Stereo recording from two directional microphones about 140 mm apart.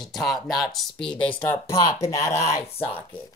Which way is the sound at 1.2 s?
10° left (ahead or behind).